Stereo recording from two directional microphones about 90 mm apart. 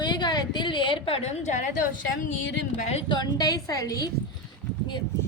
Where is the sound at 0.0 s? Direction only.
50° left (ahead or behind); by 1.2 s 85° left.